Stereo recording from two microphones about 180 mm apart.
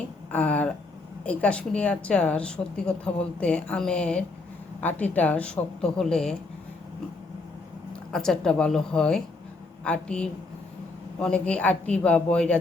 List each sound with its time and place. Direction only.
0.3 s a woman's voice: 5° left (ahead or behind)
8.1 s a woman's voice: 5° left (ahead or behind)